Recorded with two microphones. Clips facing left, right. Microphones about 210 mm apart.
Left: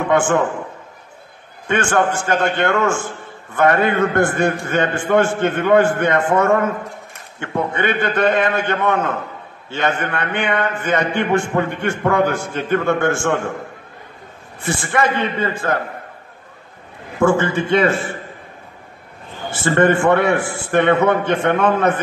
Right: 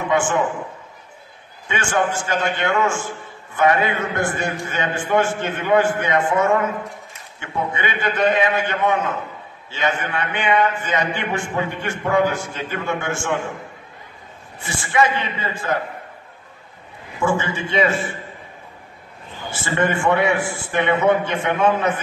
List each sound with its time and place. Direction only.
1.7 s a man's voice: 60° left (ahead or behind)
14.6 s a man's voice: 55° left (ahead or behind)
17.2 s a man's voice: 55° left (ahead or behind)
19.6 s a man's voice: 55° left (ahead or behind)